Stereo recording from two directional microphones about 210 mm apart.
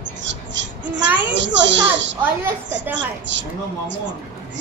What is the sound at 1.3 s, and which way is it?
Speech, 60° right (ahead or behind).